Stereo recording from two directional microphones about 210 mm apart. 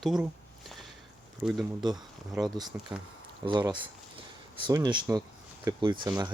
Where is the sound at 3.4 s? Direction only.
20° right (ahead or behind).